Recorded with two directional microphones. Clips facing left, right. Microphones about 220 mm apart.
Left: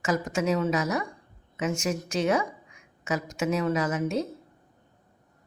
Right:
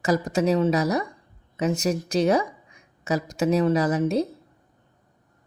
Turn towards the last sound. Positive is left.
turn(degrees=-35)  # may be behind; listen again after turning